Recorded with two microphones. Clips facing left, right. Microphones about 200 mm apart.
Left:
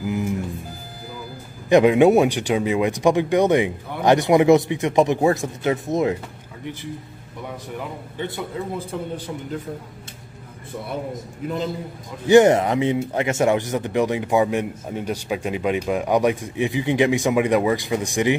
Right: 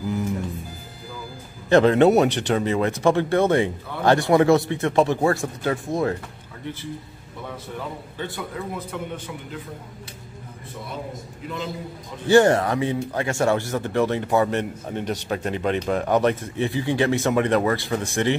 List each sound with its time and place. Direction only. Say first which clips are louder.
1.7 s speech: left 2 dB; 15° left (ahead or behind)
8.2 s a man's voice: left 3 dB; 25° left (ahead or behind)
11.4 s a man's voice: left 6 dB; 50° left (ahead or behind)
12.3 s speech: left 3 dB; 20° left (ahead or behind)